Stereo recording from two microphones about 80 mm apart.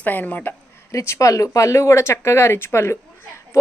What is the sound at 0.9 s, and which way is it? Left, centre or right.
Speech, left.